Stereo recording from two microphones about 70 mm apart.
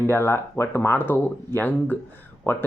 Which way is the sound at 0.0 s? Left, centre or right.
Left.